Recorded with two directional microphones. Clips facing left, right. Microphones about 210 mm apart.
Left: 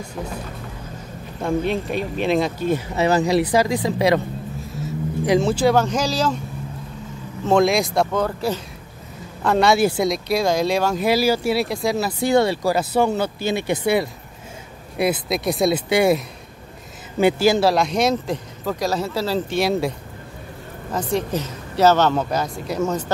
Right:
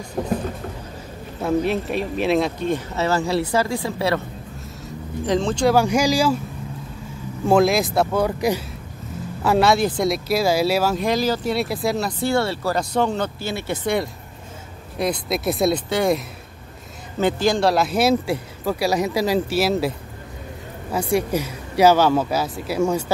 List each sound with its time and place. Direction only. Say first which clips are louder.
1.4 s speech: right 1 dB; centre (ahead or behind)
3.0 s speech: left 4 dB; 15° left (ahead or behind)
5.2 s speech: left 2 dB; 10° left (ahead or behind)
5.8 s speech: right 2 dB; 10° right (ahead or behind)
7.4 s speech: even; 5° right (ahead or behind)
9.8 s speech: left 2 dB; 5° left (ahead or behind)
11.1 s speech: left 3 dB; 10° left (ahead or behind)
12.2 s speech: left 4 dB; 15° left (ahead or behind)
15.0 s speech: left 2 dB; 5° left (ahead or behind)
15.9 s speech: left 3 dB; 10° left (ahead or behind)
17.2 s speech: left 3 dB; 10° left (ahead or behind)
20.9 s speech: right 2 dB; 10° right (ahead or behind)